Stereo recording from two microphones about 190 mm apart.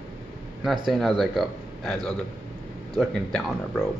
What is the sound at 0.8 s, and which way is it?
Speech, centre (ahead or behind).